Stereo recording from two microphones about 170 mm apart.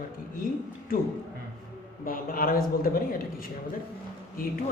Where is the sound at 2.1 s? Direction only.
60° left (ahead or behind).